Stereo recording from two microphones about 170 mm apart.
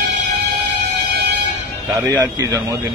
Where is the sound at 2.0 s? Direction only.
10° right (ahead or behind).